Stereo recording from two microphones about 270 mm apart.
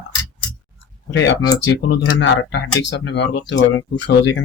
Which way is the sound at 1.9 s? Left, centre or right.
Left.